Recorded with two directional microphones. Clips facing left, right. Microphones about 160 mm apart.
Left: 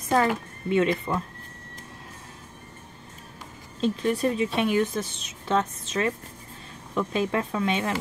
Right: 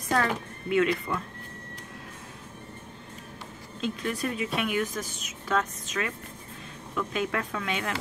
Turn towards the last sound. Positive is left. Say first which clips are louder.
# left 5 dB
turn(degrees=25)  # may be behind; listen again after turning